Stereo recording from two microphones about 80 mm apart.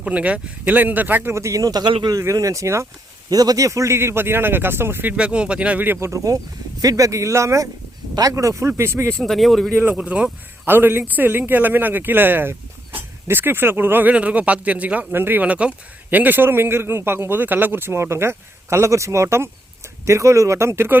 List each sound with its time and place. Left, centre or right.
0.0 s speech: centre
1.3 s a man's voice: right
3.2 s a man's voice: right
5.1 s speech: centre
6.1 s a man's voice: right
9.0 s speech: centre
9.9 s speech: centre
10.7 s a man's voice: right